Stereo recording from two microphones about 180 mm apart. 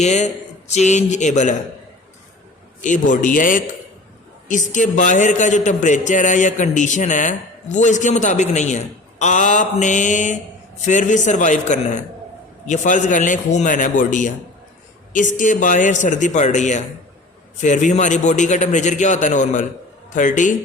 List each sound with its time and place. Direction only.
0.0 s speech: 40° left (ahead or behind)
2.8 s a man's voice: 45° left (ahead or behind)